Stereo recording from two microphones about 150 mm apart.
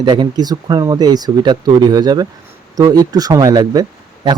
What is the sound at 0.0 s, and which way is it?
Speech, 30° right (ahead or behind).